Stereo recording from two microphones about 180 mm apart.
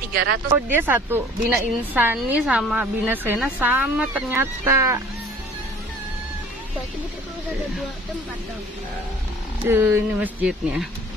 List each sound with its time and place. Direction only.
0.1 s speech: 60° right (ahead or behind)
0.7 s a woman's voice: 10° right (ahead or behind)
9.6 s a woman's voice: 15° right (ahead or behind)